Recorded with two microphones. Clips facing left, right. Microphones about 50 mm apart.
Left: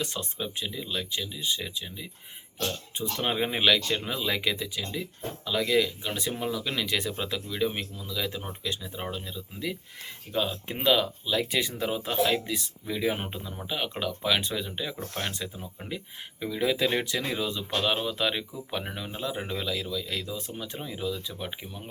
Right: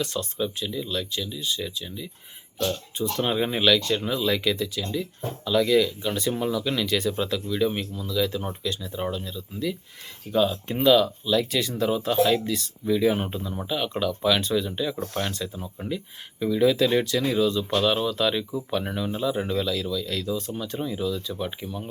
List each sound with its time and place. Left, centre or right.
0.0 s speech: left
10.3 s speech: centre
10.8 s speech: left
15.8 s speech: left; by 21.8 s centre